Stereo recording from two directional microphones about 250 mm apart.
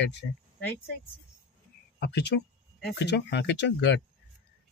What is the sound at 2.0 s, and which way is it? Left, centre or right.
Speech, left.